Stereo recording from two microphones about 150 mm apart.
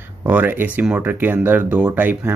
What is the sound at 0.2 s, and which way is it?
Speech, 10° right (ahead or behind).